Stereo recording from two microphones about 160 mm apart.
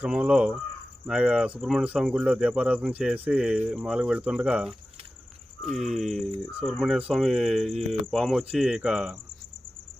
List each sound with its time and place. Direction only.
0.0 s speech: 5° right (ahead or behind)